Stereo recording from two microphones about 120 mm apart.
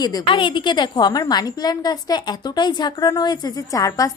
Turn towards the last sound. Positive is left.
turn(degrees=30)  # may be behind; listen again after turning